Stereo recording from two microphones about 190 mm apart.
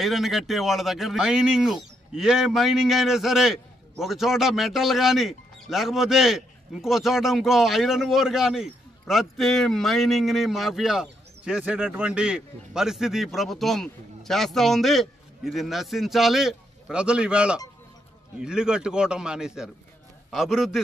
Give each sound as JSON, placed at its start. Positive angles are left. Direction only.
{"t": 0.0, "sound": "speech", "side_deg": 0}